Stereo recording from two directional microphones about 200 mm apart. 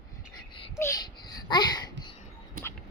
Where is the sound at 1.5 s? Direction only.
20° left (ahead or behind).